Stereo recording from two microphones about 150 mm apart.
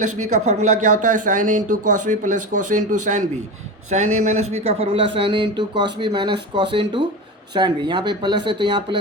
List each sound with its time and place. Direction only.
0.0 s speech: 55° right (ahead or behind); by 9.0 s 35° right (ahead or behind)